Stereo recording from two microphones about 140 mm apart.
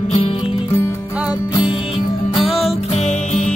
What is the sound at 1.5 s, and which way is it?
Music, 35° left (ahead or behind).